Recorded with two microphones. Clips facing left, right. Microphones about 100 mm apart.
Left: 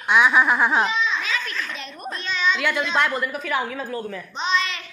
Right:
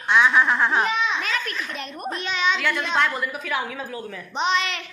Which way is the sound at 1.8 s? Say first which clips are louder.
Right 3 dB; 55° right (ahead or behind).